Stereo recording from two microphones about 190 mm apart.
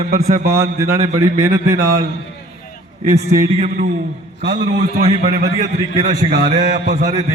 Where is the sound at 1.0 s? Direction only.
35° right (ahead or behind).